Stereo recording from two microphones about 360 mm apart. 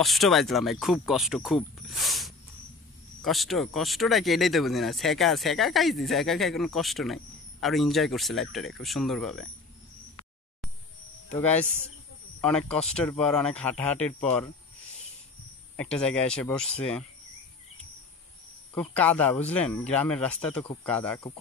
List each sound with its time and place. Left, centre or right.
0.0 s speech: centre
11.3 s speech: centre
15.7 s speech: centre
18.8 s speech: centre